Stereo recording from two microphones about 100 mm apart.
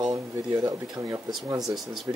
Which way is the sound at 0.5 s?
35° right (ahead or behind).